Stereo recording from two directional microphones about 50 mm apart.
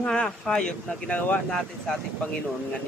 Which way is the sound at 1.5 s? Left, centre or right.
Centre.